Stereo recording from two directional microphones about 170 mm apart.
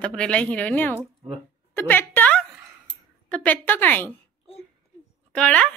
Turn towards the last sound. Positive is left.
turn(degrees=5)  # may be behind; listen again after turning